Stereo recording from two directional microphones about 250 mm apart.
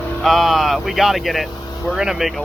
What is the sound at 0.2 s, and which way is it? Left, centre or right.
Speech, centre.